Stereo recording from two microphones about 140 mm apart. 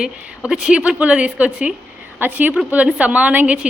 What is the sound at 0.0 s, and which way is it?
A woman's voice, 5° right (ahead or behind).